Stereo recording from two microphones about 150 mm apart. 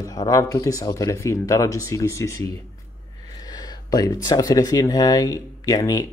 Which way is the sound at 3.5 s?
25° left (ahead or behind).